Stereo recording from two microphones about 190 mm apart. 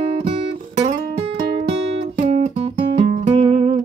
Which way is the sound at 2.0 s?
35° right (ahead or behind).